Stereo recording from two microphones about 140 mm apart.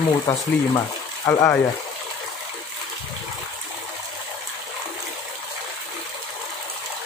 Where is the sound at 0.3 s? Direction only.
25° left (ahead or behind).